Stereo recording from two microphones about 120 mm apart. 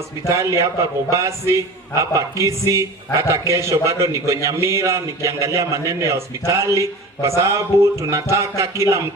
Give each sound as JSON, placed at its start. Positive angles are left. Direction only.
{"t": 0.3, "sound": "a man's voice", "side_deg": -25}